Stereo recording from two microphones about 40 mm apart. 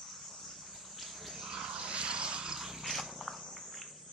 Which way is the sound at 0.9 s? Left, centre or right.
Centre.